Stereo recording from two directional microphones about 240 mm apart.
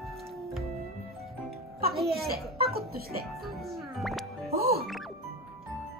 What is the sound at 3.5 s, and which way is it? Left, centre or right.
Speech, centre.